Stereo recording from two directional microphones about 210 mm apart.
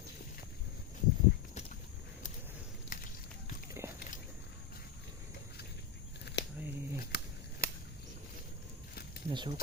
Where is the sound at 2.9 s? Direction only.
40° left (ahead or behind).